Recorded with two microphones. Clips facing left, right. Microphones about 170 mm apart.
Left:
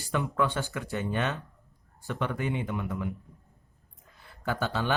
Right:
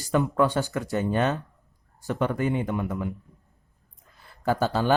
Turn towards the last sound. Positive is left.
turn(degrees=-40)  # may be behind; listen again after turning